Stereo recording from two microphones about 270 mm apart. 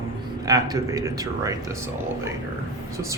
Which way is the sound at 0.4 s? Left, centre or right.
Centre.